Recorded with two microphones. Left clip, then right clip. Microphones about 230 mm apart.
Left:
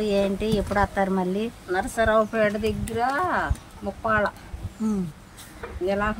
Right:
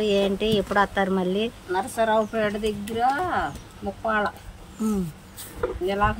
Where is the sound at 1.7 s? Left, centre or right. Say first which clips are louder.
Left 1 dB; centre.